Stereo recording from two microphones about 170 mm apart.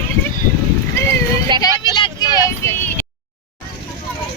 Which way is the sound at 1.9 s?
25° left (ahead or behind).